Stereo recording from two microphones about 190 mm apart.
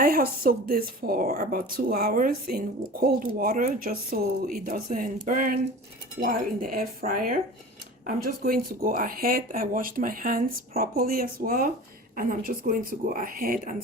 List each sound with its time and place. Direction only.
0.0 s speech: 50° right (ahead or behind)